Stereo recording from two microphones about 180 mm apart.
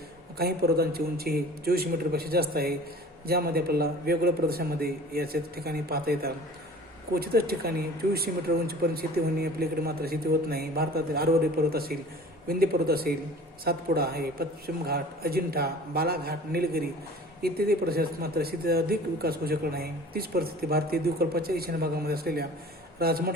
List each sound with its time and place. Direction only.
0.3 s a man's voice: 60° right (ahead or behind)